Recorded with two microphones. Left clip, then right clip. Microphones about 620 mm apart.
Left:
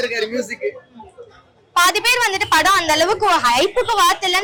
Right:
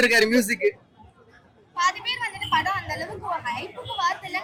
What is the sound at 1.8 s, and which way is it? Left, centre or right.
A woman's voice, left.